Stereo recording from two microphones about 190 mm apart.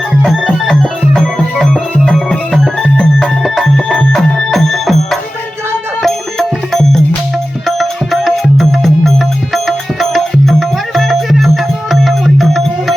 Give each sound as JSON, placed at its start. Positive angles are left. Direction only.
{"t": 0.2, "sound": "organ", "side_deg": 0}
{"t": 7.8, "sound": "music", "side_deg": 0}